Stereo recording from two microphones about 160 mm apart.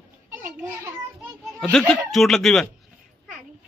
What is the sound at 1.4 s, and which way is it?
A child's voice, 5° left (ahead or behind).